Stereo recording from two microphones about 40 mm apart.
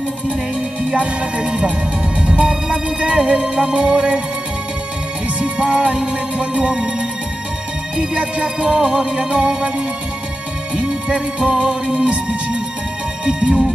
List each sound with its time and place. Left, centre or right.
1.4 s music: right
5.4 s music: right
8.0 s music: right
8.6 s music: right